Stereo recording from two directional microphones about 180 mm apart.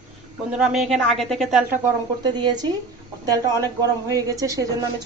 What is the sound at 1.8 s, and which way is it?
A woman's voice, 25° right (ahead or behind).